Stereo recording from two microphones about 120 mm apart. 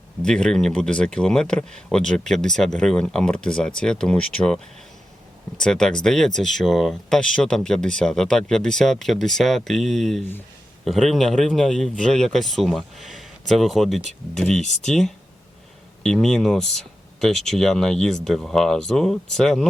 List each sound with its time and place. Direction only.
0.2 s speech: 5° left (ahead or behind)
14.6 s speech: 75° left (ahead or behind)
14.8 s speech: 5° left (ahead or behind)